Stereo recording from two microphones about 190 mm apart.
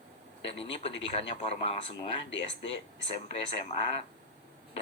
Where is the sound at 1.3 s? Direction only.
30° left (ahead or behind).